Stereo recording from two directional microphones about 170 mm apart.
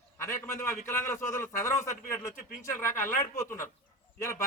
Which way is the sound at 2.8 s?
15° left (ahead or behind).